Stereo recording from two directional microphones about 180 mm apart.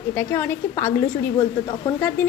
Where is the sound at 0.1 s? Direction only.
15° left (ahead or behind).